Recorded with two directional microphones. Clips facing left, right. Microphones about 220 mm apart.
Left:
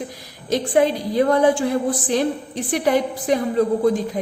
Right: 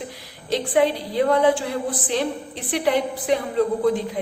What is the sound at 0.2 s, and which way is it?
A woman's voice, 45° left (ahead or behind).